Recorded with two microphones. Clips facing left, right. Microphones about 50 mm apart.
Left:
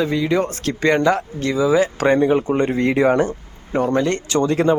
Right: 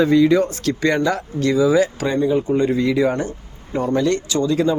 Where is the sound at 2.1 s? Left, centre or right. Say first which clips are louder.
Right 2 dB; left.